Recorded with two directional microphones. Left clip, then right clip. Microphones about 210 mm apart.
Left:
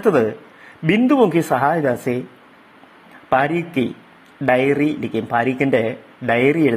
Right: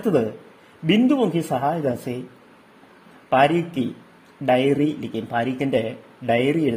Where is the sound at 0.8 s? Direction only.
10° left (ahead or behind).